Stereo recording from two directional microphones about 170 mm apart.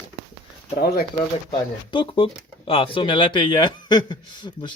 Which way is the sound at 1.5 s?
30° left (ahead or behind).